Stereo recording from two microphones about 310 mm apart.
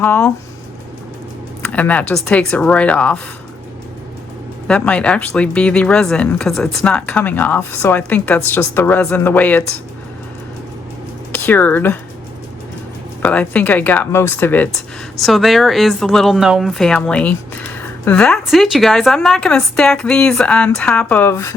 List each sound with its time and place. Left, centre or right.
0.0 s speech: centre
1.6 s speech: centre
4.7 s speech: centre
11.3 s speech: centre
13.2 s speech: centre